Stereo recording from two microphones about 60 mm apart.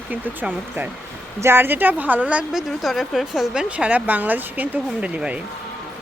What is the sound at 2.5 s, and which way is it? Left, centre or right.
A woman's voice, centre.